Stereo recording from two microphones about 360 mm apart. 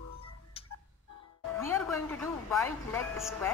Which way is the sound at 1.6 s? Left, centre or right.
Centre.